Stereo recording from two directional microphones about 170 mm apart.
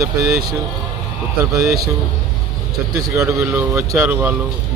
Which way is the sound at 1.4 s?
15° right (ahead or behind).